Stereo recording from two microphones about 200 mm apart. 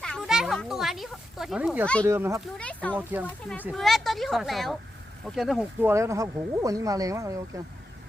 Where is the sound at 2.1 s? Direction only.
10° right (ahead or behind).